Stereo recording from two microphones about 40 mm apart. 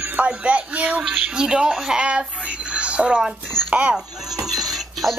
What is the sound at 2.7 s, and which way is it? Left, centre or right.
Music, right.